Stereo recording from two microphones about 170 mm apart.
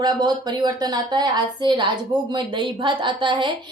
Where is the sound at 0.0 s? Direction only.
25° right (ahead or behind).